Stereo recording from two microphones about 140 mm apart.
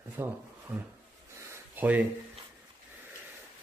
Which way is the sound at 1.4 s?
15° right (ahead or behind).